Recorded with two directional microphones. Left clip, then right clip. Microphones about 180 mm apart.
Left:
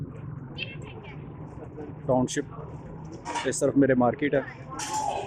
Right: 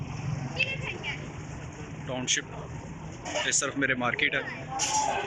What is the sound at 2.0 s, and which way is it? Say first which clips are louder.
Speech: left 4 dB; 45° left (ahead or behind).